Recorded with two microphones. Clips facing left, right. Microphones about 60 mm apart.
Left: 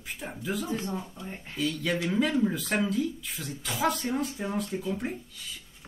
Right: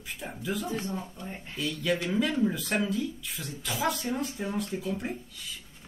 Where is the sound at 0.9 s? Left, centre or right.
Centre.